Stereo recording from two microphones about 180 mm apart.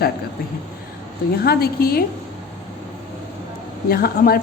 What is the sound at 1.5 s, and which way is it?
Speech, 55° left (ahead or behind).